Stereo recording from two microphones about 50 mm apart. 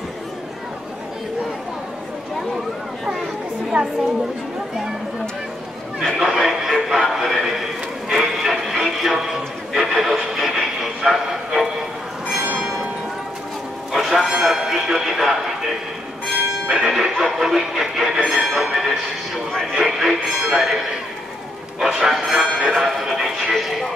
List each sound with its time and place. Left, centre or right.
3.8 s a woman's voice: centre
6.0 s speech: centre
8.1 s music: centre
13.9 s music: centre
14.3 s a man's voice: centre
16.6 s speech: centre
17.2 s a sound: centre
19.7 s speech: centre
21.8 s speech: centre